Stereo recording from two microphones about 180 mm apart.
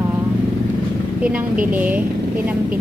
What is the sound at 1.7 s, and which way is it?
Speech, 10° right (ahead or behind).